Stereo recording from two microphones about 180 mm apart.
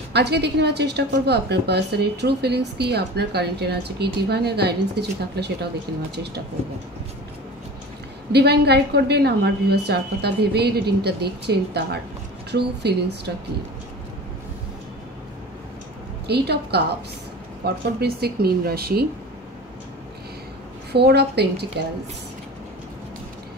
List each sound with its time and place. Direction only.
0.1 s a woman's voice: 65° right (ahead or behind)
8.3 s a woman's voice: 65° right (ahead or behind)
16.3 s a woman's voice: 65° right (ahead or behind)
20.9 s a woman's voice: 65° right (ahead or behind)